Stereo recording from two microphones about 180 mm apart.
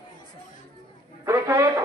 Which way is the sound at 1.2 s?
15° right (ahead or behind).